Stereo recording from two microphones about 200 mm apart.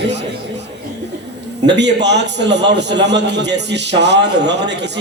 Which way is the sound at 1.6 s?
60° right (ahead or behind).